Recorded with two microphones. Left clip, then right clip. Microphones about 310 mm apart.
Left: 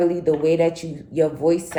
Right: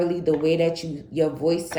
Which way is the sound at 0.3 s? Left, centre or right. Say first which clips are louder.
Left 1 dB; centre.